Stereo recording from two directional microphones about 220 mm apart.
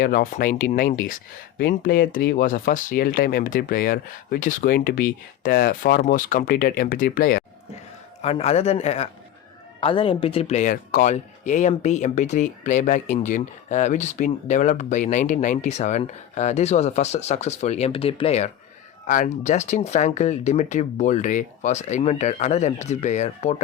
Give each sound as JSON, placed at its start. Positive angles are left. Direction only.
{"t": 0.0, "sound": "speech", "side_deg": 40}
{"t": 8.2, "sound": "a man's voice", "side_deg": 30}